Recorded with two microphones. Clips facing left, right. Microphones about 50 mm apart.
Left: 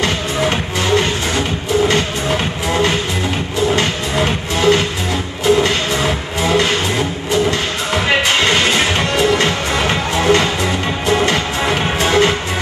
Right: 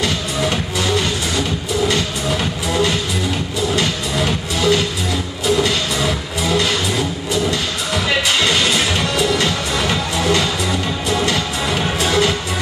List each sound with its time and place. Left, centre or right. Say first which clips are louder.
0.0 s music: left 3 dB; left